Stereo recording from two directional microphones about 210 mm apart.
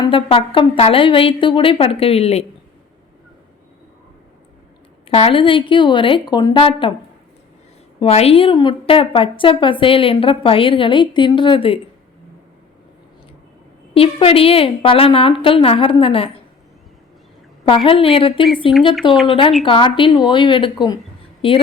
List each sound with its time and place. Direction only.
0.1 s a woman's voice: 25° left (ahead or behind)
5.0 s a woman's voice: 25° left (ahead or behind)
7.9 s a woman's voice: 30° left (ahead or behind)
13.9 s a woman's voice: 25° left (ahead or behind)
17.7 s a woman's voice: 25° left (ahead or behind)
19.1 s speech: centre (ahead or behind)
19.6 s a woman's voice: 25° left (ahead or behind)